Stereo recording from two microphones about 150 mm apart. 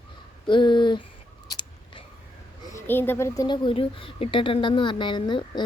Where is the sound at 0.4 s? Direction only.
30° left (ahead or behind).